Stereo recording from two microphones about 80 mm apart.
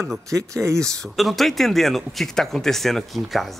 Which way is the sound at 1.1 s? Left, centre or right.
Centre.